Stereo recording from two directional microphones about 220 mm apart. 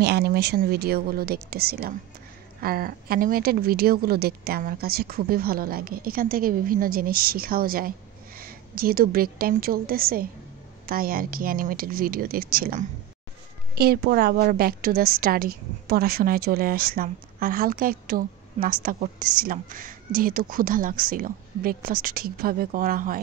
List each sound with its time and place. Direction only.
0.0 s a woman's voice: 45° right (ahead or behind)